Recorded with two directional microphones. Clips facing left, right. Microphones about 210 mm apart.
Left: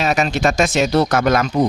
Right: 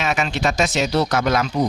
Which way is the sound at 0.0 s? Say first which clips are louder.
Left 4 dB; 40° left (ahead or behind).